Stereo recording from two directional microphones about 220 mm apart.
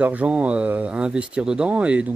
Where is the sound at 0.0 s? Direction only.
5° right (ahead or behind).